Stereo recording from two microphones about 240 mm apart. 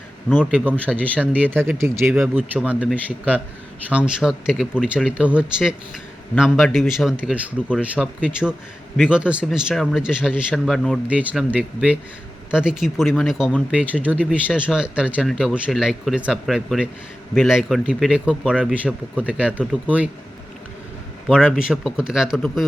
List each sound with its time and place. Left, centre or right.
0.3 s speech: centre
21.2 s speech: centre